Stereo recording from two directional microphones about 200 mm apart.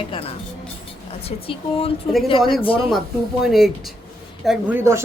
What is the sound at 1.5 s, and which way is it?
A woman's voice, 30° left (ahead or behind).